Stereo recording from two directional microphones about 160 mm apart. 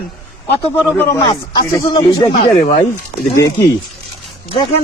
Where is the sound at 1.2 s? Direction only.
30° left (ahead or behind).